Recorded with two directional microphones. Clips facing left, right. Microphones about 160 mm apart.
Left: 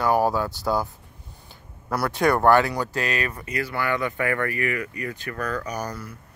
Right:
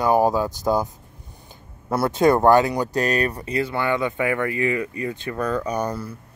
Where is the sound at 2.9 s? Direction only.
40° right (ahead or behind).